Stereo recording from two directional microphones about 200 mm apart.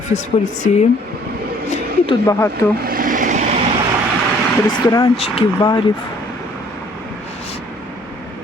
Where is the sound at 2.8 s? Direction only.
45° right (ahead or behind).